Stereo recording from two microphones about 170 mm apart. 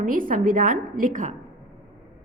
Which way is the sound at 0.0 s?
55° right (ahead or behind).